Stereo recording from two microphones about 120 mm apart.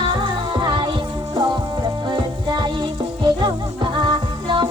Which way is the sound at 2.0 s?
40° right (ahead or behind).